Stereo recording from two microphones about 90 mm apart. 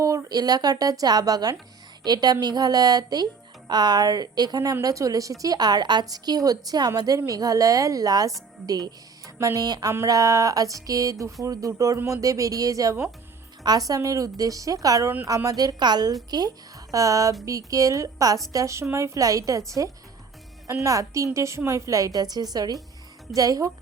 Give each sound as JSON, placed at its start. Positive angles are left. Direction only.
{"t": 0.0, "sound": "a woman's voice", "side_deg": -40}
{"t": 10.1, "sound": "a woman's voice", "side_deg": -35}